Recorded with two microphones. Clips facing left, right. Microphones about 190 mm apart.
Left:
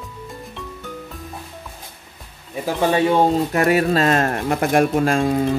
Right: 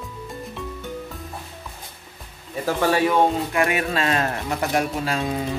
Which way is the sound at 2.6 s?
20° left (ahead or behind).